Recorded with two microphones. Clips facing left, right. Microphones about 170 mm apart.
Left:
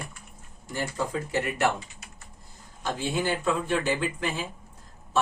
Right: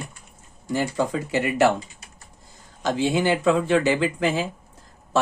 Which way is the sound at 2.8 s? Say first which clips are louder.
Right 7 dB; 90° right.